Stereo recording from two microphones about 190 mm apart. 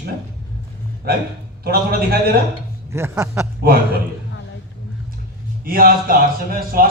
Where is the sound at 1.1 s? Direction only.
55° right (ahead or behind).